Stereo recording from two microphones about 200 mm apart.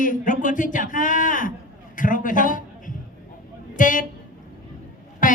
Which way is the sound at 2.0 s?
40° left (ahead or behind).